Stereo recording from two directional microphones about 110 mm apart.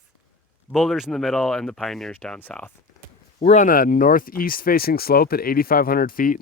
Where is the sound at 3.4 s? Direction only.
60° left (ahead or behind).